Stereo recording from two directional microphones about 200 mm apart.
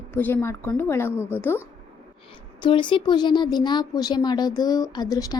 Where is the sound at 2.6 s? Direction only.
25° left (ahead or behind).